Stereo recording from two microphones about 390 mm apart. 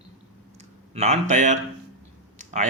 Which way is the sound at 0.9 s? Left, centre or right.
Centre.